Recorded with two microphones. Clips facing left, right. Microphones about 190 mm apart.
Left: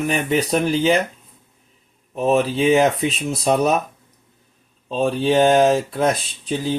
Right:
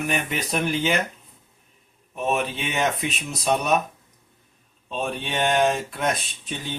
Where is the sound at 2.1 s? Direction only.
35° left (ahead or behind).